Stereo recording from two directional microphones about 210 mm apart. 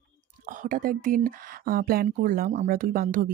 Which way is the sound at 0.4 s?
40° right (ahead or behind).